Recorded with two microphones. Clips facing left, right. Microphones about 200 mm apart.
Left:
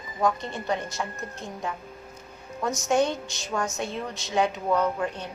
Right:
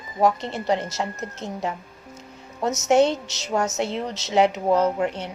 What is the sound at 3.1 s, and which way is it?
Music, 70° right (ahead or behind).